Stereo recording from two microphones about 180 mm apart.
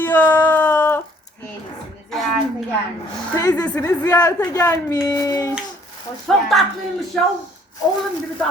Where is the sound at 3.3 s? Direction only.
15° left (ahead or behind).